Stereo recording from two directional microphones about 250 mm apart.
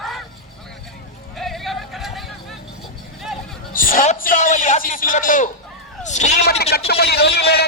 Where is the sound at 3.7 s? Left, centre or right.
Left.